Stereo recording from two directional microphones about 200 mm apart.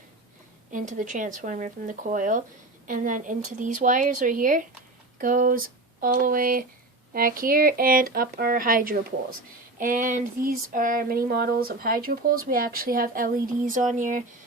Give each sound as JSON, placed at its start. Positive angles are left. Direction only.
{"t": 0.7, "sound": "speech", "side_deg": -40}